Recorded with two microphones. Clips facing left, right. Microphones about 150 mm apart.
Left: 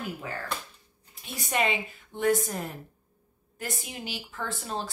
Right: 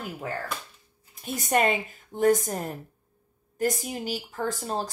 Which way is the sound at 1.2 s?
50° right (ahead or behind).